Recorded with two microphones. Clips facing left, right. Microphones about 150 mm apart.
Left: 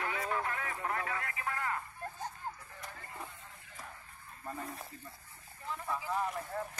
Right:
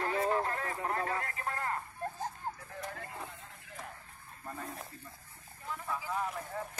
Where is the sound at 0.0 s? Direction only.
35° right (ahead or behind).